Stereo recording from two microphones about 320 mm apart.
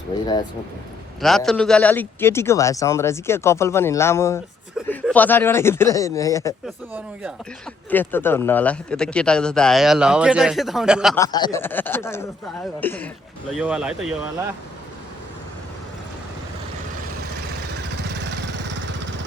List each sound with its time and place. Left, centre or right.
1.2 s speech: centre
6.9 s a man's voice: centre
11.2 s a man's voice: centre
17.8 s vehicle: right